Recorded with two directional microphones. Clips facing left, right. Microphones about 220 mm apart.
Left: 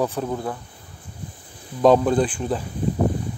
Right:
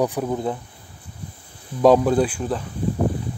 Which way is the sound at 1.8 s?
10° right (ahead or behind).